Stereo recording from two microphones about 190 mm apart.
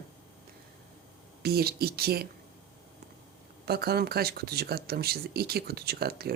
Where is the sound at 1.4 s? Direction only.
55° right (ahead or behind).